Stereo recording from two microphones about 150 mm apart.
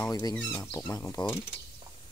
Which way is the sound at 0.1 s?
25° left (ahead or behind).